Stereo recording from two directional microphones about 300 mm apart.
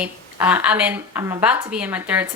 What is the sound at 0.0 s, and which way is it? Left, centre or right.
A woman's voice, centre.